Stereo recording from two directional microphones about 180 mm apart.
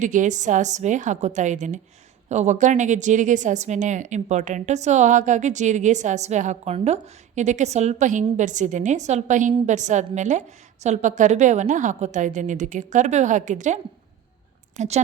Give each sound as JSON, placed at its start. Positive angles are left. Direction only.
{"t": 0.0, "sound": "a woman's voice", "side_deg": -45}
{"t": 14.8, "sound": "a woman's voice", "side_deg": -40}